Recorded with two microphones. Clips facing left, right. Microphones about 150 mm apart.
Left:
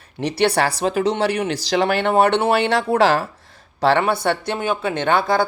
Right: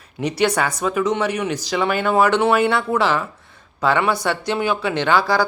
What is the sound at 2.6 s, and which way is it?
Speech, 75° left (ahead or behind).